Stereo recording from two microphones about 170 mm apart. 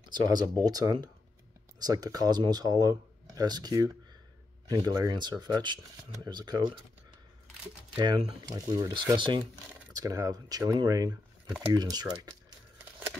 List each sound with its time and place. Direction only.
0.0 s speech: 25° right (ahead or behind)
8.0 s speech: 25° right (ahead or behind)